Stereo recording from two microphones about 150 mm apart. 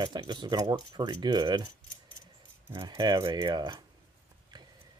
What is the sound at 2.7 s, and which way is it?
Speech, 30° right (ahead or behind).